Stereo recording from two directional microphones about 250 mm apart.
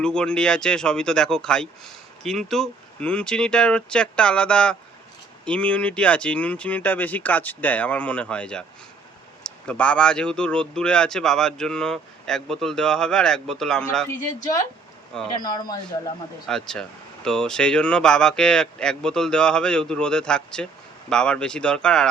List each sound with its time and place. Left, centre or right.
0.0 s speech: centre
15.4 s speech: centre
16.5 s speech: centre